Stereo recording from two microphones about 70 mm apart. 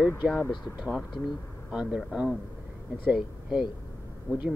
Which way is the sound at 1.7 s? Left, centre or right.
Centre.